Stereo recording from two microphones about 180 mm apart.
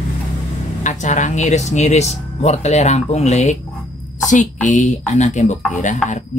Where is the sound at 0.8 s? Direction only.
45° left (ahead or behind).